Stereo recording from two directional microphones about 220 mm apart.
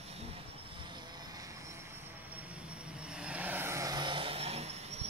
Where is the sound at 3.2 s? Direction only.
5° right (ahead or behind); by 5.0 s 30° right (ahead or behind).